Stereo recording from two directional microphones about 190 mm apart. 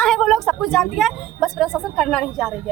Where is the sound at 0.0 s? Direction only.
Centre (ahead or behind).